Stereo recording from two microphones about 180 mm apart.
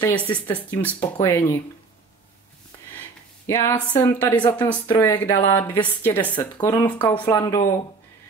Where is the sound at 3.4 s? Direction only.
15° left (ahead or behind).